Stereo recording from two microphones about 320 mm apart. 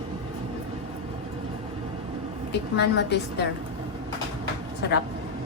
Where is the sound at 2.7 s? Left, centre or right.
Left.